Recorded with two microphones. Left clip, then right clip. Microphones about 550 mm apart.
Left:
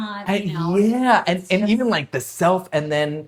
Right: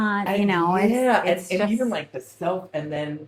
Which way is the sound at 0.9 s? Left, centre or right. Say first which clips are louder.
Left 2 dB; left.